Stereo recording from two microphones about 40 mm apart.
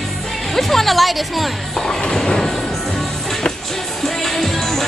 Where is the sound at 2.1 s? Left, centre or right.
Centre.